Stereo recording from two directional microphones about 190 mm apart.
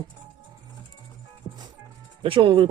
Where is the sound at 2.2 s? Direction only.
25° right (ahead or behind).